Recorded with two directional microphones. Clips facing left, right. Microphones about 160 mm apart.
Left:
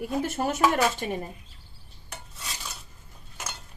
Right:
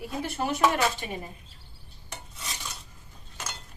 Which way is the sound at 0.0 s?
45° left (ahead or behind).